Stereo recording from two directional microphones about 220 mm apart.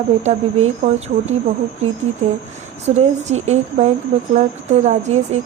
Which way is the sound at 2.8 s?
30° right (ahead or behind).